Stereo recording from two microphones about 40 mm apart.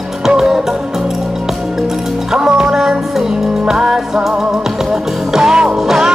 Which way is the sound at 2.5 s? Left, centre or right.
Right.